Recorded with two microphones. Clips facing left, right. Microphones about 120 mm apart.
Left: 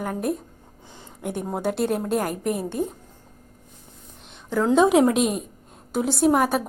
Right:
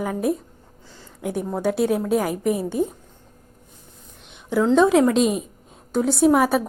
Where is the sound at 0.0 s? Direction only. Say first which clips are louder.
Right 3 dB; centre (ahead or behind).